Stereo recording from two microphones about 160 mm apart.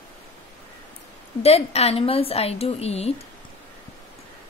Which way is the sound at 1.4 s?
40° left (ahead or behind).